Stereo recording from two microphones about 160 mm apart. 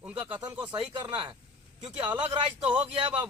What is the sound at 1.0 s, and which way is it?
Speech, 30° right (ahead or behind).